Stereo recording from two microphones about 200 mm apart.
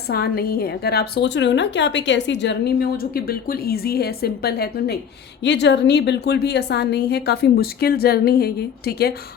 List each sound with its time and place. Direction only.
0.1 s a woman's voice: 50° left (ahead or behind)